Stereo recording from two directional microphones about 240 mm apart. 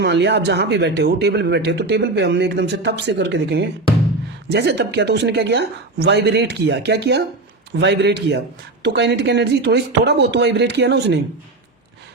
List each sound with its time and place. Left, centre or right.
0.0 s speech: right